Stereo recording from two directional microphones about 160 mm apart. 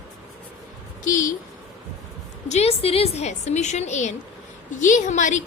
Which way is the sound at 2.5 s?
40° left (ahead or behind).